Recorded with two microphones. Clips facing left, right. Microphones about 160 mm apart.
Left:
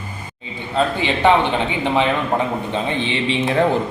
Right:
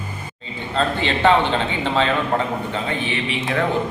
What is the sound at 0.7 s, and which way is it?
A man's voice, 15° left (ahead or behind).